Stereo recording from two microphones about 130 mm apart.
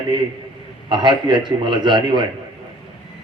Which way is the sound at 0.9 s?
35° right (ahead or behind).